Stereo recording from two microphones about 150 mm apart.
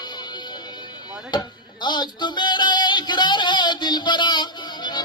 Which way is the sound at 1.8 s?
30° left (ahead or behind).